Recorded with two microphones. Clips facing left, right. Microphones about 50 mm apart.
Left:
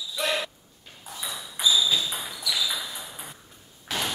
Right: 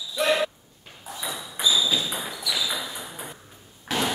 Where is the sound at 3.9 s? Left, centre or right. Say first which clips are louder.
Right 4 dB; centre.